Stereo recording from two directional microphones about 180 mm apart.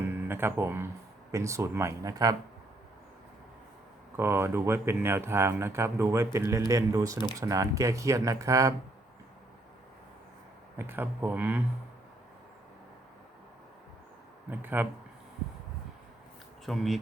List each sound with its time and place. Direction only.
0.1 s music: 10° right (ahead or behind)
1.3 s speech: 15° right (ahead or behind)
4.2 s speech: 15° right (ahead or behind)
10.8 s speech: 10° right (ahead or behind)
14.6 s speech: 10° right (ahead or behind)
16.6 s speech: centre (ahead or behind)